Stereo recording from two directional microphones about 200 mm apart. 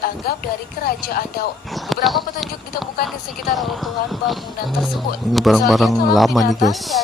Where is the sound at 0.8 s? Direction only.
50° left (ahead or behind).